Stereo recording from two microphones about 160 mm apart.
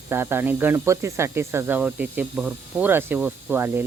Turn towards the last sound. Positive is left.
turn(degrees=-15)  # may be behind; listen again after turning